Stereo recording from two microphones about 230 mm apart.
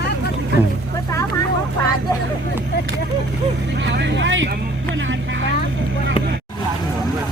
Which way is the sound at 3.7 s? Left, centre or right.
Right.